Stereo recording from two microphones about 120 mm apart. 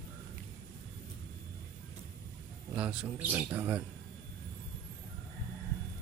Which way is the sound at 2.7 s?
10° right (ahead or behind).